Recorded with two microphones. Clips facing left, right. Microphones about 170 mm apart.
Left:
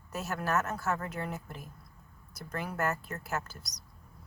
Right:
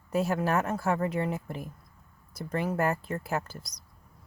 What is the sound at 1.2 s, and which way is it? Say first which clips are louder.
Speech: right 7 dB; 25° right (ahead or behind).